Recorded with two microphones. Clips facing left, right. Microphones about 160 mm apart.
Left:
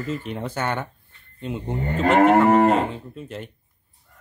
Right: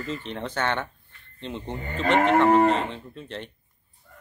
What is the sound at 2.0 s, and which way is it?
Cattle, 45° left (ahead or behind).